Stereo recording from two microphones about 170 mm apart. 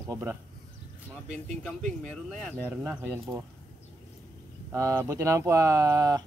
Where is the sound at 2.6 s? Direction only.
10° right (ahead or behind).